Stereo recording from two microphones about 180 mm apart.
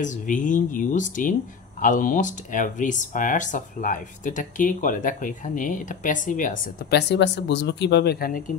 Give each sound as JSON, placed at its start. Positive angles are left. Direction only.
{"t": 0.0, "sound": "speech", "side_deg": 45}